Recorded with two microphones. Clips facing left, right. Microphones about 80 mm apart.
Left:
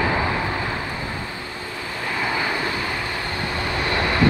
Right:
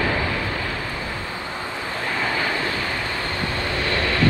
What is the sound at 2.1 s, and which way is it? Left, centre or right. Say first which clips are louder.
Vehicle: left 1 dB; centre.